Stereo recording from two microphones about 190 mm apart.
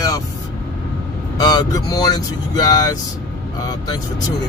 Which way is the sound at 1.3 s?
20° left (ahead or behind).